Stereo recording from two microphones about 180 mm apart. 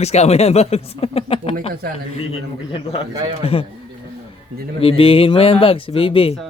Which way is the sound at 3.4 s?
30° left (ahead or behind).